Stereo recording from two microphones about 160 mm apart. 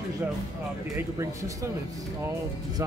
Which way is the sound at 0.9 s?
20° right (ahead or behind).